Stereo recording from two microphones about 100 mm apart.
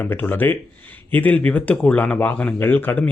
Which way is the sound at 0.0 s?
20° left (ahead or behind).